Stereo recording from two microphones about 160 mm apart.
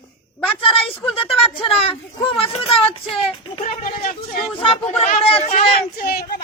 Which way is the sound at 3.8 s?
60° left (ahead or behind).